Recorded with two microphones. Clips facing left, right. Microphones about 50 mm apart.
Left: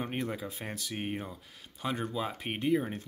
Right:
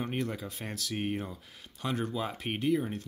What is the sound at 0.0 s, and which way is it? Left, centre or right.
Speech, centre.